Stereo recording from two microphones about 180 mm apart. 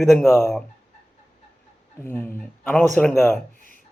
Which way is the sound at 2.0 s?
10° left (ahead or behind).